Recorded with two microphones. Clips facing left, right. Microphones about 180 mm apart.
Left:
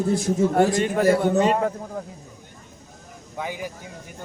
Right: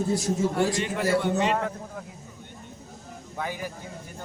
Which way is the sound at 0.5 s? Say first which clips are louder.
Left 6 dB; 50° left (ahead or behind).